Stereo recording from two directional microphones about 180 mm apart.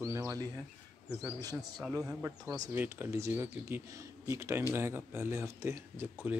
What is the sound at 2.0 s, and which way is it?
Speech, 5° right (ahead or behind).